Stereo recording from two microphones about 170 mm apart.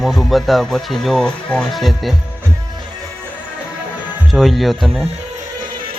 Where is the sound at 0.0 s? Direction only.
Centre (ahead or behind).